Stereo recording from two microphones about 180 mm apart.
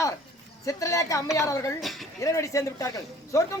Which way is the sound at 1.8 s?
Centre (ahead or behind).